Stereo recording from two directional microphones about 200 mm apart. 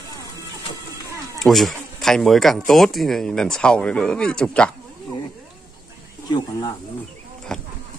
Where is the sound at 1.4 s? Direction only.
Centre (ahead or behind).